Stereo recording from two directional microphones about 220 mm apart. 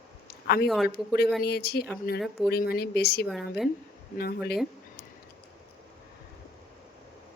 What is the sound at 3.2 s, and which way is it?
Speech, centre (ahead or behind).